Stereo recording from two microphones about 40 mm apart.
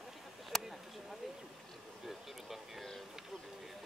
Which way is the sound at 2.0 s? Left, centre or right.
Centre.